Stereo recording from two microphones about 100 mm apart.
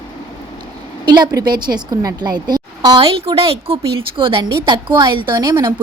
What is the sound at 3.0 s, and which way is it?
Speech, 70° right (ahead or behind).